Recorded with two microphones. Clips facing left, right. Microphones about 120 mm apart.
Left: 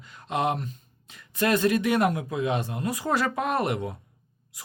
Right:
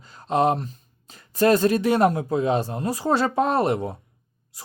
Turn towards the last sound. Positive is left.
turn(degrees=-35)  # may be behind; listen again after turning